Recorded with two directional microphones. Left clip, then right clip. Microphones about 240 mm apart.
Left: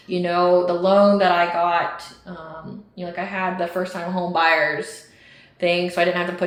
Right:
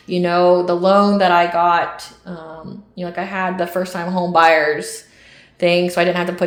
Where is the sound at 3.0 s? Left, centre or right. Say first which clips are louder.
Right 4 dB; right.